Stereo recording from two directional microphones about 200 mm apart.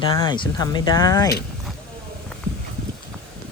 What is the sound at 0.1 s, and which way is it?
Speech, 25° left (ahead or behind).